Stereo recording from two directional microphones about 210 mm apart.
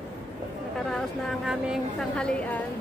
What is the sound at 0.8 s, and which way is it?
A woman's voice, centre (ahead or behind).